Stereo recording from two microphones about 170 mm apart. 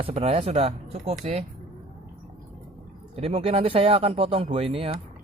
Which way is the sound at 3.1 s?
35° right (ahead or behind).